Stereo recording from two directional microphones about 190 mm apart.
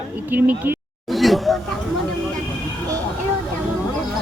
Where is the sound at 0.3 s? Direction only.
10° right (ahead or behind).